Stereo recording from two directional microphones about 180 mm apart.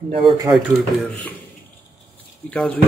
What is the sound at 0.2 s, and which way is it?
Speech, 30° right (ahead or behind).